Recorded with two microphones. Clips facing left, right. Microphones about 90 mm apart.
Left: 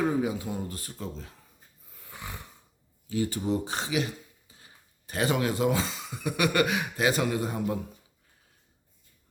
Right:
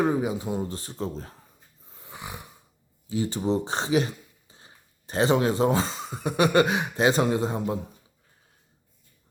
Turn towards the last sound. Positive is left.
turn(degrees=-25)  # may be behind; listen again after turning